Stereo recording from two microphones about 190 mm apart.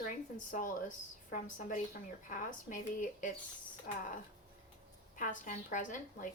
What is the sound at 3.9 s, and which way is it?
Speech, 45° left (ahead or behind).